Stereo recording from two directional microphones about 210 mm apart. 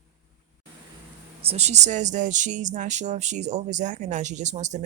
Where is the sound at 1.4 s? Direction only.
30° right (ahead or behind).